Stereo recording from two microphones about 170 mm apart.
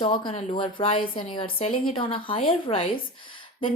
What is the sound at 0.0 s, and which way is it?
A woman's voice, 30° left (ahead or behind).